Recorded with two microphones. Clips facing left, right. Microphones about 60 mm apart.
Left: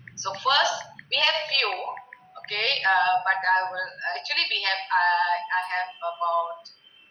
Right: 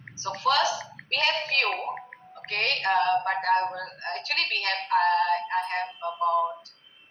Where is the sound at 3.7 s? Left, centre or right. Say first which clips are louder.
Left 4 dB; left.